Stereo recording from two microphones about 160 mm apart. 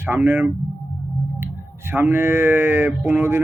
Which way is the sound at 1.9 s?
15° right (ahead or behind).